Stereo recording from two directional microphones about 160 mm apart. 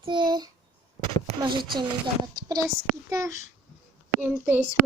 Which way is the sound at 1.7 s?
30° right (ahead or behind).